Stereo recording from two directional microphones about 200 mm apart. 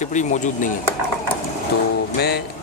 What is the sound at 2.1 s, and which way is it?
Speech, 55° left (ahead or behind).